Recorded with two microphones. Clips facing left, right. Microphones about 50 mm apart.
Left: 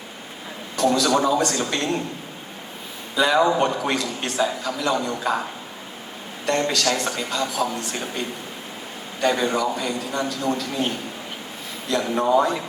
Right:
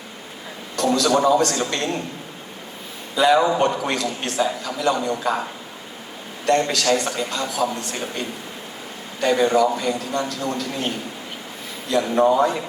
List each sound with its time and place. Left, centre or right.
0.8 s a man's voice: centre
3.2 s a man's voice: centre
6.4 s a woman's voice: centre
9.2 s a man's voice: centre